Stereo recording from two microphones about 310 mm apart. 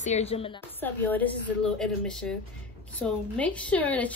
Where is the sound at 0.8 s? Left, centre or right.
Centre.